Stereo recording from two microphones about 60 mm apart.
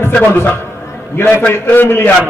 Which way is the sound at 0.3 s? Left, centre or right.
Left.